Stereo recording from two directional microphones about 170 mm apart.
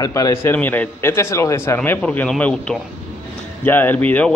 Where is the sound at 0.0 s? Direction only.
20° left (ahead or behind).